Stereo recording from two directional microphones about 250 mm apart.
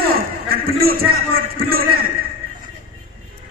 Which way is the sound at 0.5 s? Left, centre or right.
Right.